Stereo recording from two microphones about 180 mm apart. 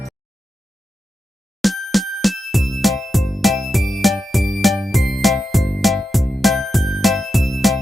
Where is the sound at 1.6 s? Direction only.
Centre (ahead or behind).